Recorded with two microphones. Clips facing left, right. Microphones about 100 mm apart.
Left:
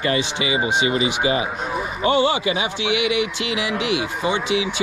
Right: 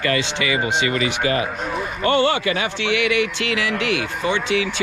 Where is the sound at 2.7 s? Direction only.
15° left (ahead or behind).